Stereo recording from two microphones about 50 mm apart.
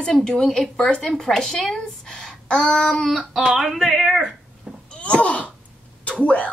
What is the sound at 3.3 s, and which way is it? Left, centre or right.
Speech, centre.